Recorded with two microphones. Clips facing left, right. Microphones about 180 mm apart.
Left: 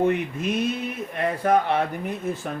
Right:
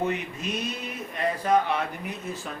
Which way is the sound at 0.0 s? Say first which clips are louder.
Left 6 dB; 55° left (ahead or behind).